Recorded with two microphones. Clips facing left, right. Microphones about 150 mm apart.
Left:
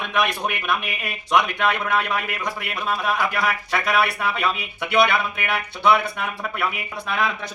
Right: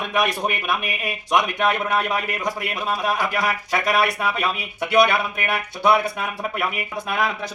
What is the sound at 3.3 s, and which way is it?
A man's voice, 15° right (ahead or behind).